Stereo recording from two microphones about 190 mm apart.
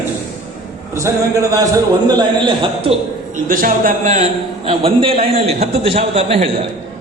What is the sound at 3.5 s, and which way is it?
A man's voice, 45° right (ahead or behind).